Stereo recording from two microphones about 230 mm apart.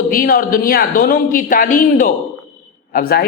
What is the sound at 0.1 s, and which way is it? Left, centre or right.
A man's voice, left.